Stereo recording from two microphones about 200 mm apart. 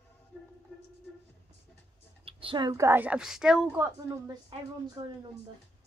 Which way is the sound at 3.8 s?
15° right (ahead or behind).